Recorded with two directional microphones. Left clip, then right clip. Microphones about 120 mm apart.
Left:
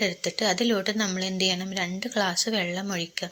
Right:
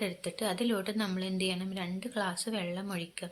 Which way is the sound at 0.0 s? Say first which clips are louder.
Left 9 dB; 25° left (ahead or behind).